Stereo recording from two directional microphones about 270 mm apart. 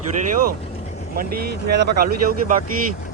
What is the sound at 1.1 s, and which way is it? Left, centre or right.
Speech, right.